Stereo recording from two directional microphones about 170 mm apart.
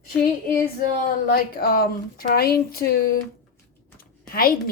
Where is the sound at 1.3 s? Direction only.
65° left (ahead or behind).